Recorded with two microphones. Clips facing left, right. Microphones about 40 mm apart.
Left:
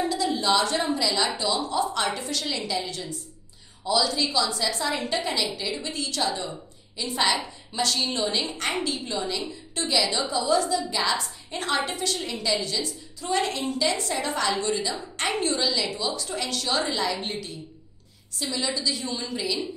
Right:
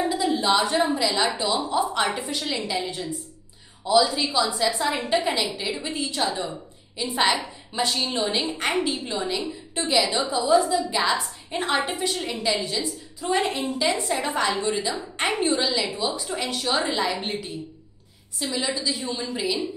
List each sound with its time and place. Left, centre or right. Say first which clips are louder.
0.1 s a sound: right 2 dB; centre
0.5 s a woman's voice: right 2 dB; centre
18.5 s a woman's voice: right 1 dB; centre